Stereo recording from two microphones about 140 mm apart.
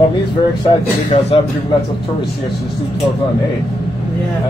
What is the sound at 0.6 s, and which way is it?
Speech, 40° left (ahead or behind).